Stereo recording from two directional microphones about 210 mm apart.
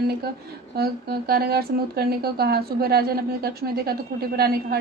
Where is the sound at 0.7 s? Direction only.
50° right (ahead or behind).